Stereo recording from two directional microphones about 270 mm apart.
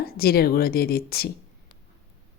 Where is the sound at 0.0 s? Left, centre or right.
Left.